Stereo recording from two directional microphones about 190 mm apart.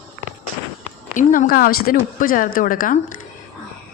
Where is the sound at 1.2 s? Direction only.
45° left (ahead or behind).